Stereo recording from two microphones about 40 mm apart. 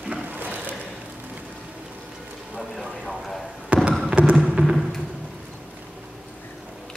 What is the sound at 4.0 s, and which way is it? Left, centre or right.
Music, right.